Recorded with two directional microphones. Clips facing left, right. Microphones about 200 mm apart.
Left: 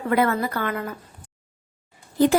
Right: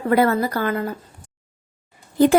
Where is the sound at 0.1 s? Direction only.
35° right (ahead or behind).